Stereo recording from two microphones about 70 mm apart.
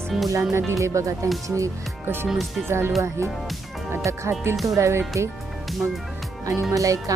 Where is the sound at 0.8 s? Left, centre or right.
Right.